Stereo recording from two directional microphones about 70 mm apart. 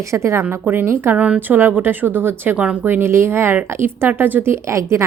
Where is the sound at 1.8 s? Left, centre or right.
Right.